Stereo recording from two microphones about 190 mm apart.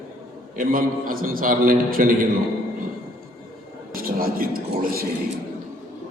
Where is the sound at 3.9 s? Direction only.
50° right (ahead or behind).